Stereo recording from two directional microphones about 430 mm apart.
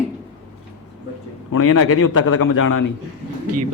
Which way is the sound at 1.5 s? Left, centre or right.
Left.